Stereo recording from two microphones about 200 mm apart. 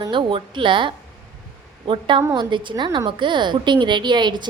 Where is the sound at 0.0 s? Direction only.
25° right (ahead or behind).